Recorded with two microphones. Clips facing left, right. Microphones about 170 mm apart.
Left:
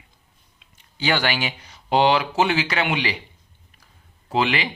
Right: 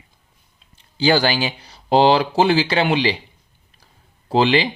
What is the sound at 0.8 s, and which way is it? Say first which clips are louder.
Speech: right 6 dB; 30° right (ahead or behind).